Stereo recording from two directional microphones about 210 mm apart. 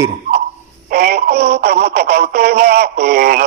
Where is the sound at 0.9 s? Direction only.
50° right (ahead or behind).